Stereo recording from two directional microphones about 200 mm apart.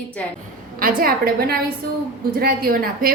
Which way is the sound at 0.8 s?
45° right (ahead or behind).